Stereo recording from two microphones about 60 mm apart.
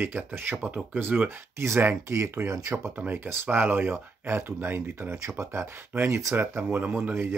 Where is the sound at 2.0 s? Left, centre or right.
Right.